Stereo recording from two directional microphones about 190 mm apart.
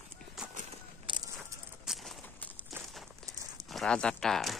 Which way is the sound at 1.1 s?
25° right (ahead or behind).